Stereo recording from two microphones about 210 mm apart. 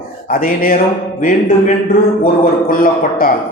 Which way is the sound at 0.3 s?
40° left (ahead or behind).